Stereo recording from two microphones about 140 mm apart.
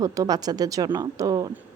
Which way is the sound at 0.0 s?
25° right (ahead or behind).